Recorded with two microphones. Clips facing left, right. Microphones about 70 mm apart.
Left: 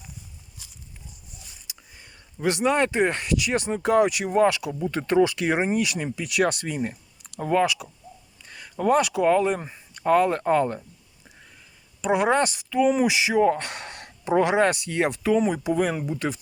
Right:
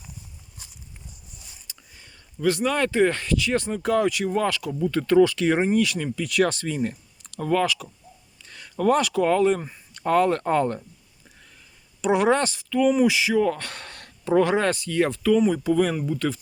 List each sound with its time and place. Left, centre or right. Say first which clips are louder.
1.6 s speech: left 1 dB; centre
7.6 s speech: left 1 dB; centre
12.0 s speech: right 1 dB; centre